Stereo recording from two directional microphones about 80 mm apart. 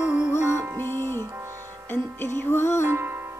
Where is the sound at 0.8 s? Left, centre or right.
Left.